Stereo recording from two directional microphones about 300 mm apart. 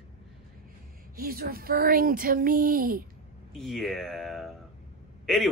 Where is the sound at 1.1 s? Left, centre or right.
Right.